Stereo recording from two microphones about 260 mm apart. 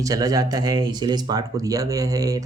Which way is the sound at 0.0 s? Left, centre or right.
Centre.